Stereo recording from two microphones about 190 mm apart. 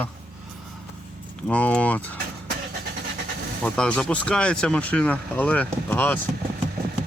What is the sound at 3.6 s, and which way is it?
Speech, 5° left (ahead or behind).